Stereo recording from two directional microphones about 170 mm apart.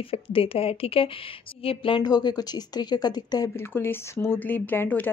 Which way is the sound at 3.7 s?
15° left (ahead or behind).